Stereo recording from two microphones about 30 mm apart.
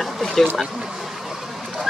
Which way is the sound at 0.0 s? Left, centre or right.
Centre.